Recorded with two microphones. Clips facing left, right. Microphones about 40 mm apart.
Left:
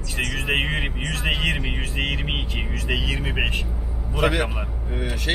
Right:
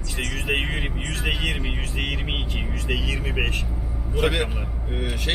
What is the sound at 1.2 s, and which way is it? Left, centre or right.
Speech, centre.